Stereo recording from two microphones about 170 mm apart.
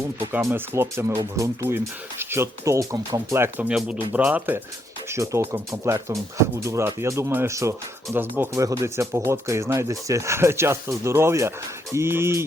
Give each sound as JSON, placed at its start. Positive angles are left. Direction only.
{"t": 0.3, "sound": "speech", "side_deg": -15}